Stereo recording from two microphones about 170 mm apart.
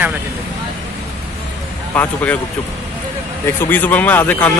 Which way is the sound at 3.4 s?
10° left (ahead or behind).